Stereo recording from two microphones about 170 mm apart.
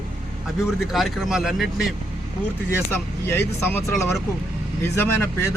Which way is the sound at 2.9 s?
10° left (ahead or behind).